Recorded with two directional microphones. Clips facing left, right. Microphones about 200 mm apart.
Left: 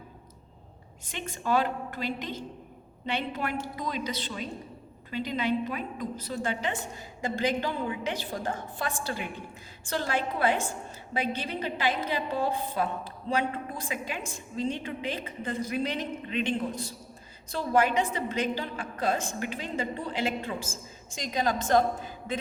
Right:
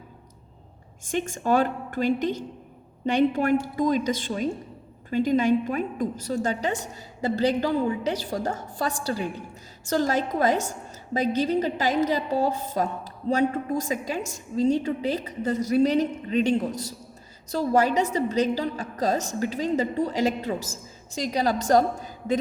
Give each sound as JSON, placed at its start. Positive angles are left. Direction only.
{"t": 1.0, "sound": "a woman's voice", "side_deg": -45}